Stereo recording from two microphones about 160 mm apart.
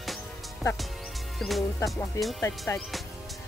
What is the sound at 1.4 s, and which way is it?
Speech, 5° left (ahead or behind).